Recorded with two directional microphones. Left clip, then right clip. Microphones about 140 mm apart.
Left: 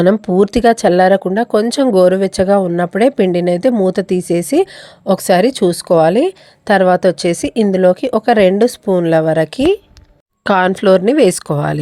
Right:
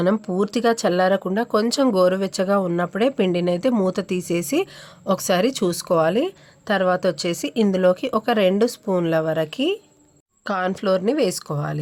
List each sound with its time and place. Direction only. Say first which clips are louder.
0.0 s speech: left 10 dB; 50° left (ahead or behind)
10.4 s speech: left 11 dB; 65° left (ahead or behind)